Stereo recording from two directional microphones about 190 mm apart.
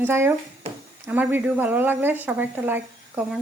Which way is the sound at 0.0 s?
10° right (ahead or behind).